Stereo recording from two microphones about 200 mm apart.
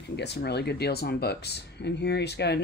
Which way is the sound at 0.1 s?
55° left (ahead or behind).